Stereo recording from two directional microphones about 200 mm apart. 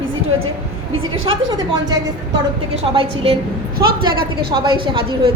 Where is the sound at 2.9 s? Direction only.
30° right (ahead or behind).